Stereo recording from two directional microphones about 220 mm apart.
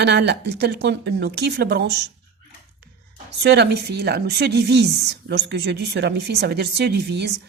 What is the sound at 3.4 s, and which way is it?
Speech, 50° right (ahead or behind).